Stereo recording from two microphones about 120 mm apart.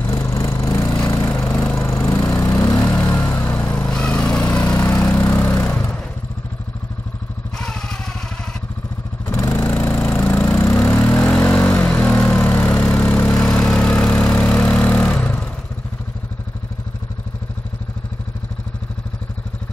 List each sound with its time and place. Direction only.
0.0 s a sound: 25° left (ahead or behind)
1.8 s lawn mower: 25° left (ahead or behind)
5.7 s vehicle: 5° left (ahead or behind)
7.5 s vehicle: 5° left (ahead or behind)
9.3 s vehicle: 25° left (ahead or behind)
9.7 s a sound: 15° left (ahead or behind)
10.6 s vehicle: 20° left (ahead or behind)